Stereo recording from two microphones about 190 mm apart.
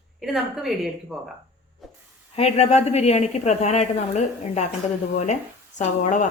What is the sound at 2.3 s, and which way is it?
A woman's voice, 35° left (ahead or behind).